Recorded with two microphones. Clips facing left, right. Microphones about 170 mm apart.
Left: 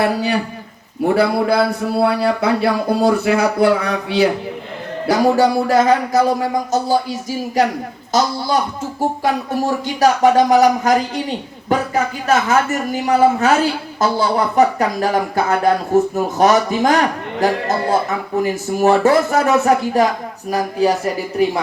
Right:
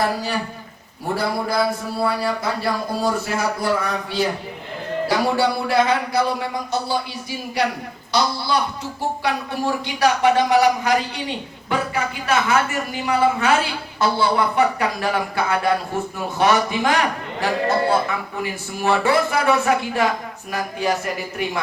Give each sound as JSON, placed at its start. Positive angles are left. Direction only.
{"t": 0.0, "sound": "a man's voice", "side_deg": 65}
{"t": 5.0, "sound": "a woman's voice", "side_deg": 45}